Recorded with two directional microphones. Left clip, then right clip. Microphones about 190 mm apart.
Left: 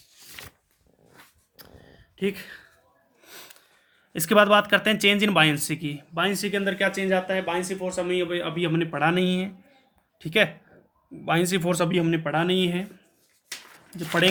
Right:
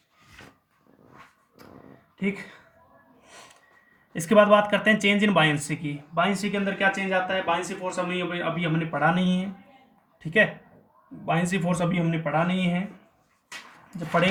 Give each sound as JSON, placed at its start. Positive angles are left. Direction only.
{"t": 2.1, "sound": "speech", "side_deg": 35}
{"t": 3.2, "sound": "a sound", "side_deg": 40}
{"t": 4.1, "sound": "speech", "side_deg": 40}